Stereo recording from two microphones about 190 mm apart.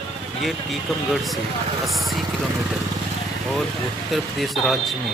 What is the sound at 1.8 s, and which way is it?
Speech, centre (ahead or behind).